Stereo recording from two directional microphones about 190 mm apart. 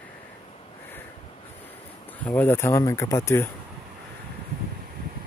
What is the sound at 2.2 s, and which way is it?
Speech, 10° left (ahead or behind).